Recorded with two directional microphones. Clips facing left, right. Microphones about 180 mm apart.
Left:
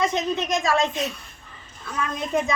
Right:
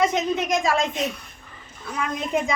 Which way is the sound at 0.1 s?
15° right (ahead or behind).